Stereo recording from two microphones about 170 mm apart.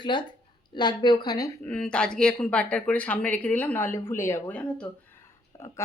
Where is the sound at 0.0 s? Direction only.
25° left (ahead or behind).